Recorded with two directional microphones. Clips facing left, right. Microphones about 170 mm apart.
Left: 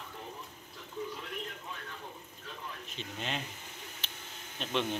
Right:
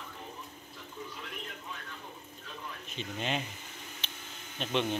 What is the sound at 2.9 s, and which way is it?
Speech, centre (ahead or behind).